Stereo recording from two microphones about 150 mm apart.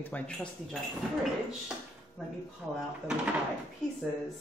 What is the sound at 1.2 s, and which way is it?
Speech, 5° right (ahead or behind).